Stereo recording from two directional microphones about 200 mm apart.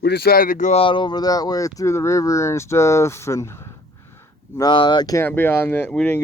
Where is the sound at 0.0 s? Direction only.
55° left (ahead or behind); by 3.5 s 15° left (ahead or behind).